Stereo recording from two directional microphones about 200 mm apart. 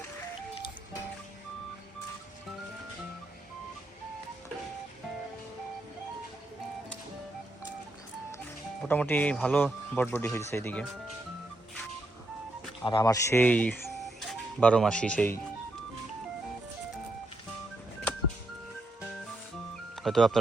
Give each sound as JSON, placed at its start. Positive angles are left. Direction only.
{"t": 8.8, "sound": "speech", "side_deg": 10}
{"t": 12.8, "sound": "speech", "side_deg": 20}
{"t": 20.0, "sound": "speech", "side_deg": 0}